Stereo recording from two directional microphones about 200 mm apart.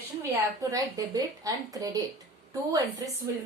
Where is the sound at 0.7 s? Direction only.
15° right (ahead or behind).